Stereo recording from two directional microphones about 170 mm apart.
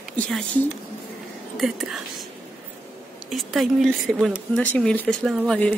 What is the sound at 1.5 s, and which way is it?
Speech, centre (ahead or behind).